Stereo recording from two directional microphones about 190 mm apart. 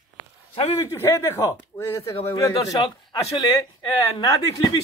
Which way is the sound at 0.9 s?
15° left (ahead or behind).